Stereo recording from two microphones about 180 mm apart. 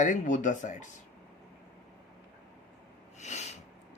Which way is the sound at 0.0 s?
45° left (ahead or behind).